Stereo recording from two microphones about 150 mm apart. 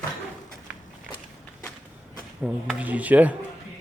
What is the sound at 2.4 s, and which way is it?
Speech, 10° right (ahead or behind).